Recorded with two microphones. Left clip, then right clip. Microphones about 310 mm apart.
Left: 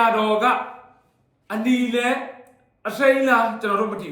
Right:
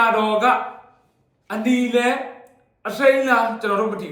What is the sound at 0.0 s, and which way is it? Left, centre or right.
Speech, centre.